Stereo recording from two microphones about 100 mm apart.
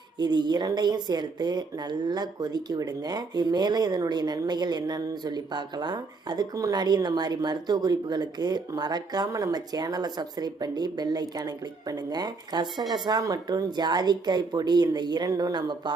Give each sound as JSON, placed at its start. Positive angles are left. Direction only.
{"t": 0.2, "sound": "speech", "side_deg": -45}